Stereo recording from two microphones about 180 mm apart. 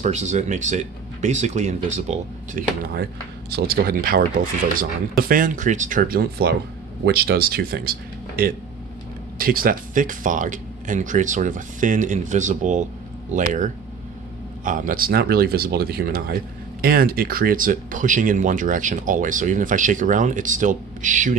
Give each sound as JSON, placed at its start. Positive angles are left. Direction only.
{"t": 0.0, "sound": "speech", "side_deg": -40}